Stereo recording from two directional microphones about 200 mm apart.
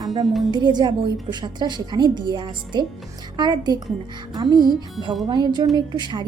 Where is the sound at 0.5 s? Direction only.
20° right (ahead or behind).